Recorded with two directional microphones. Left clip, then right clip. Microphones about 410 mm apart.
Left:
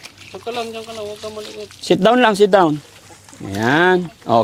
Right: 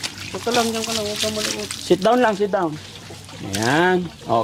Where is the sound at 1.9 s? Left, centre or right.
Left.